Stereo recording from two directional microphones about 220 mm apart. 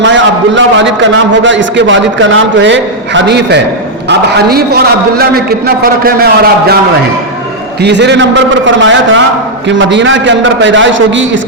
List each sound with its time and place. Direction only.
0.5 s a man's voice: 55° right (ahead or behind)
7.8 s a man's voice: 50° right (ahead or behind)